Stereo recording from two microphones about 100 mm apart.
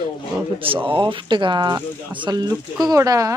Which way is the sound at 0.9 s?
60° right (ahead or behind).